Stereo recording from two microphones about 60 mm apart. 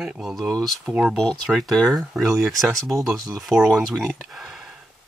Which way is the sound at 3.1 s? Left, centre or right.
Right.